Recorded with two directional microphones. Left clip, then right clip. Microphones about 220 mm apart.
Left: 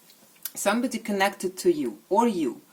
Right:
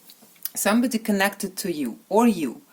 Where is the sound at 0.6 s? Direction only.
40° right (ahead or behind).